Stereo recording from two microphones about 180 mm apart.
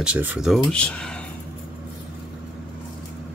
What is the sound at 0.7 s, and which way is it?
Speech, 5° left (ahead or behind).